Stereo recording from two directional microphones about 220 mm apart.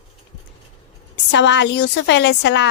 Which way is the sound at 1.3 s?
55° left (ahead or behind).